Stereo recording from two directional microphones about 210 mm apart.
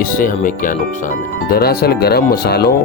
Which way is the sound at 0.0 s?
40° left (ahead or behind).